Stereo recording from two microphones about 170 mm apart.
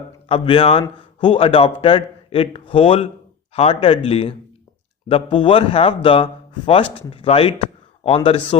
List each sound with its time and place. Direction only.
0.3 s a man's voice: 30° left (ahead or behind)